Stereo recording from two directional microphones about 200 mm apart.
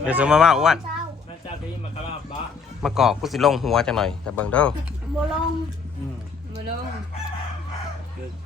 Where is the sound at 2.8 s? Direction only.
Centre (ahead or behind).